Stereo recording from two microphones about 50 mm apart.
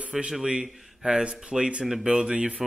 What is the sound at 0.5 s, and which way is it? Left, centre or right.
Speech, centre.